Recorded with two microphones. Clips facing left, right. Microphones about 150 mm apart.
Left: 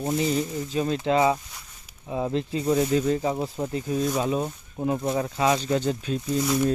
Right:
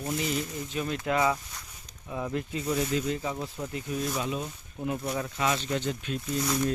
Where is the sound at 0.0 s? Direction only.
35° left (ahead or behind).